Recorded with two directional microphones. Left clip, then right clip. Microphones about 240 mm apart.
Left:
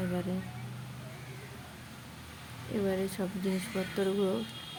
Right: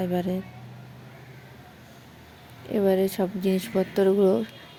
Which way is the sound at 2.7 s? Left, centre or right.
Right.